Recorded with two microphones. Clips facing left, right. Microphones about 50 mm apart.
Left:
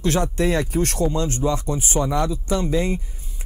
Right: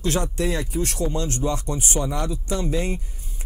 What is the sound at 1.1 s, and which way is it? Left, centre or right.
Speech, left.